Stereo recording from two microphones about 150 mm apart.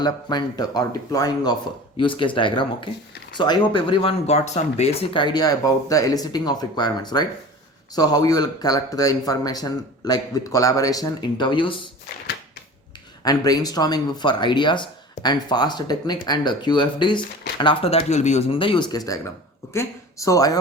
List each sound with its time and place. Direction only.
0.0 s speech: 30° left (ahead or behind)
2.0 s speech: 35° left (ahead or behind)
13.2 s speech: 25° left (ahead or behind)